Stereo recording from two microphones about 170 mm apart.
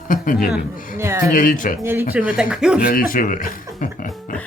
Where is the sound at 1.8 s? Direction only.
15° right (ahead or behind).